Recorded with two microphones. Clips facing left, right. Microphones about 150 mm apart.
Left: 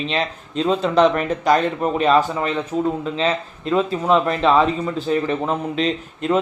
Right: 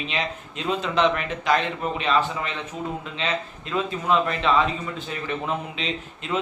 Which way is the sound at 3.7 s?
40° left (ahead or behind).